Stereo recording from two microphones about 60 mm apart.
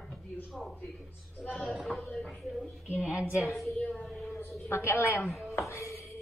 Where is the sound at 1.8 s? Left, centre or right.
Centre.